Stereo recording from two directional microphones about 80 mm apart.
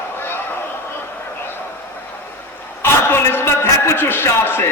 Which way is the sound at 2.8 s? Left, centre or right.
Left.